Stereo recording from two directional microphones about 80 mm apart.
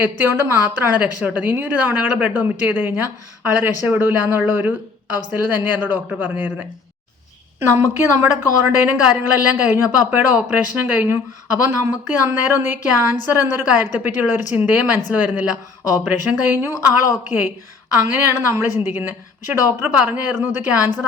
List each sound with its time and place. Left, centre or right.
0.0 s a woman's voice: right
7.6 s a woman's voice: right; by 20.9 s centre